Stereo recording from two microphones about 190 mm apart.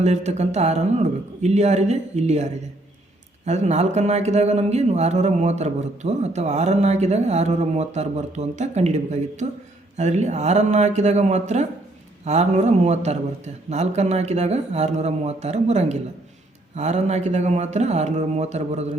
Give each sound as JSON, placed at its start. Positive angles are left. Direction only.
{"t": 0.0, "sound": "speech", "side_deg": -35}